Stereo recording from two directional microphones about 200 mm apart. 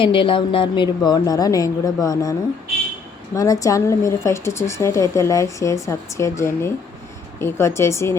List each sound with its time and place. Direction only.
0.0 s a woman's voice: 25° left (ahead or behind)
3.3 s a woman's voice: 15° left (ahead or behind)